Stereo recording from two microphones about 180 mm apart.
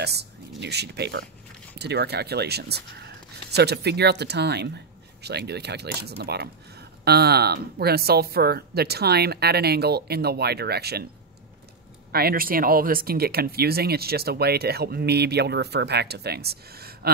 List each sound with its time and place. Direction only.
0.0 s speech: 65° right (ahead or behind)
12.1 s speech: 60° right (ahead or behind)